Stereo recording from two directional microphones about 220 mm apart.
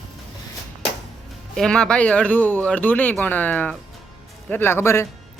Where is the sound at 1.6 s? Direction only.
5° left (ahead or behind).